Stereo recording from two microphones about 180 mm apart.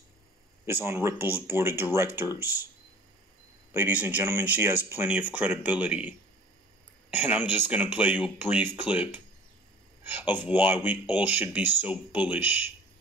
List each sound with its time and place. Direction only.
0.7 s speech: 10° right (ahead or behind)
3.7 s speech: 10° right (ahead or behind)